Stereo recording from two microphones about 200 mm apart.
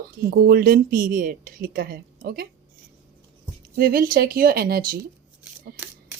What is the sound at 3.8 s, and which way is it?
A woman's voice, 45° right (ahead or behind).